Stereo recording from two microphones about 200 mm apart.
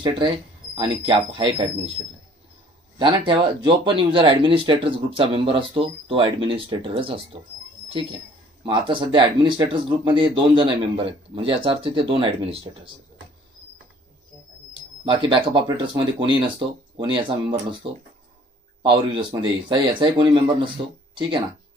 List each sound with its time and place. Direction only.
0.7 s speech: 25° right (ahead or behind)
3.0 s speech: 25° right (ahead or behind)
14.7 s speech: 25° right (ahead or behind)
18.8 s speech: 25° right (ahead or behind)